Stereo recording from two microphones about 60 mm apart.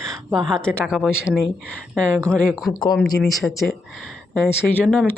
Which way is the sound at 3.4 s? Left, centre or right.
Centre.